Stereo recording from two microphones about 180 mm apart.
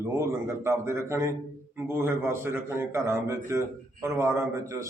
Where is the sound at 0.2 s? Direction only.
15° right (ahead or behind).